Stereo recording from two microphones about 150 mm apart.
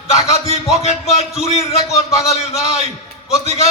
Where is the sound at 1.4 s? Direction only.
45° left (ahead or behind).